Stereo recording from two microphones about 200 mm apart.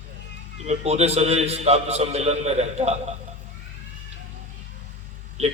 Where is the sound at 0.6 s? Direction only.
35° right (ahead or behind).